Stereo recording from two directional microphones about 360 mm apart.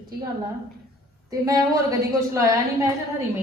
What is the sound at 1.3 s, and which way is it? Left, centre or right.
A woman's voice, centre.